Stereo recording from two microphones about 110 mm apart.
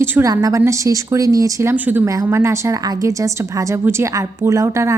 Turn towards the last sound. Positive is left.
turn(degrees=-25)  # may be behind; listen again after turning